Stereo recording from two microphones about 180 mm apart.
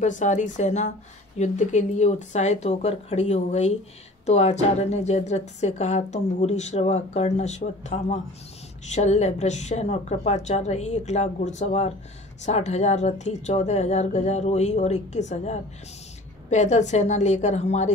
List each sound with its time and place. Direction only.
0.0 s a woman's voice: 45° left (ahead or behind)